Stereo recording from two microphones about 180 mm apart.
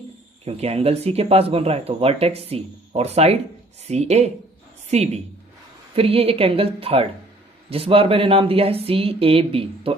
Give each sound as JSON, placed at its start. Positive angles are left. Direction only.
{"t": 0.4, "sound": "speech", "side_deg": -35}